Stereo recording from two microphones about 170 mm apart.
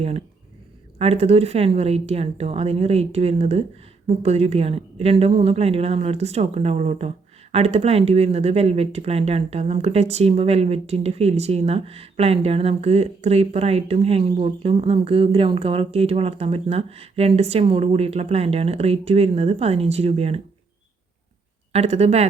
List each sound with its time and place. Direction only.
0.9 s speech: 35° right (ahead or behind)
21.7 s speech: 40° right (ahead or behind)